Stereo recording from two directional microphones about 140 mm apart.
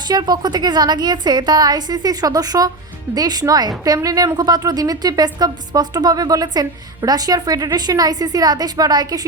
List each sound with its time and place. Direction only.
0.1 s a woman's voice: 30° right (ahead or behind)